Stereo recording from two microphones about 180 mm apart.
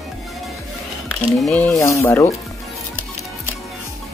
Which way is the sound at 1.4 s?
5° left (ahead or behind).